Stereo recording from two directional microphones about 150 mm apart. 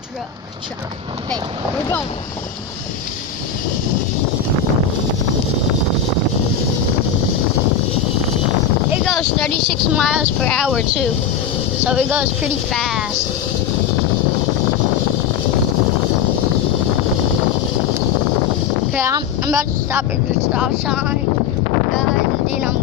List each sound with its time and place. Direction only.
8.9 s speech: centre (ahead or behind)
10.7 s speech: 5° right (ahead or behind)
18.9 s speech: 15° right (ahead or behind)
20.5 s speech: 5° right (ahead or behind)